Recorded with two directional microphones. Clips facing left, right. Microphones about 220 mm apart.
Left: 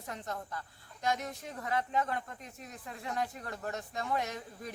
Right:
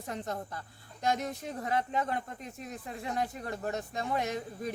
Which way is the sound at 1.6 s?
25° right (ahead or behind).